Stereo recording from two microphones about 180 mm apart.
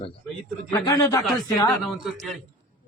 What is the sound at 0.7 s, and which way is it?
Speech, 20° left (ahead or behind).